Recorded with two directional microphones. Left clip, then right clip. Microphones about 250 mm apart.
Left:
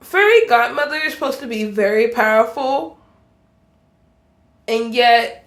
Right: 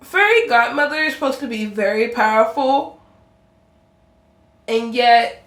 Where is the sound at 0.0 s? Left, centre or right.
Left.